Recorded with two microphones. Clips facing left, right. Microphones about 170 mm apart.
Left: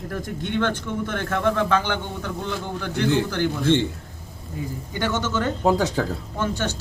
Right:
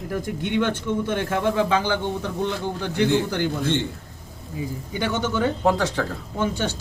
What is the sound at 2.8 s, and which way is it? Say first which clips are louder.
Speech: right 1 dB; 15° right (ahead or behind).